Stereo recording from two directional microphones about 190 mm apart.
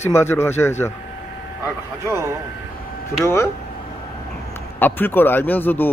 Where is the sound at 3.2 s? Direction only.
15° left (ahead or behind).